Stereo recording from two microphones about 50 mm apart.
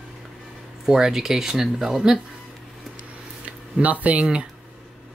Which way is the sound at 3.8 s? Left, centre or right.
Right.